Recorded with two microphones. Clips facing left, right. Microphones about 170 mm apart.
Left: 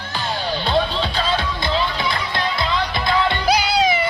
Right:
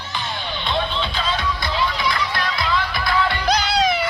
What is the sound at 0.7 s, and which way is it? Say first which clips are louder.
Music: left 3 dB; 35° left (ahead or behind).